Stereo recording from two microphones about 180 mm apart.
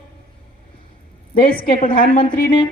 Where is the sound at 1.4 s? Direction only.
55° left (ahead or behind).